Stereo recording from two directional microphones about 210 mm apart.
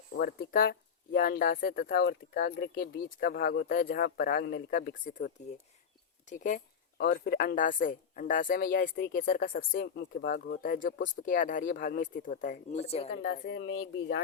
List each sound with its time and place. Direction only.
0.1 s speech: 45° left (ahead or behind); by 13.1 s 30° left (ahead or behind)
13.1 s speech: 50° left (ahead or behind)